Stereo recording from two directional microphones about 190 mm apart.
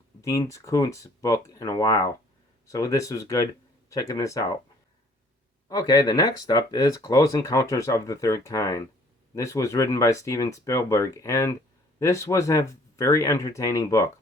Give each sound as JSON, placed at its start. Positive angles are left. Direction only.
{"t": 0.2, "sound": "speech", "side_deg": 15}
{"t": 5.6, "sound": "speech", "side_deg": 20}